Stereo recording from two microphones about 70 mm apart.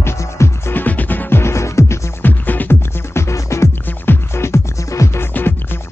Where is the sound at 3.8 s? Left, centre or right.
Left.